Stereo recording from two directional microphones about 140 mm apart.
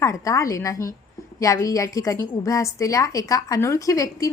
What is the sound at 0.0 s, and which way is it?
A woman's voice, 25° left (ahead or behind).